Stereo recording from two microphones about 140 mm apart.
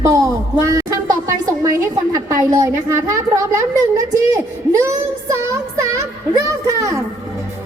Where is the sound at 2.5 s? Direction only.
20° right (ahead or behind).